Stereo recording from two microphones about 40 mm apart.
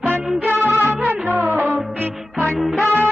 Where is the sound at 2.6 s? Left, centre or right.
Centre.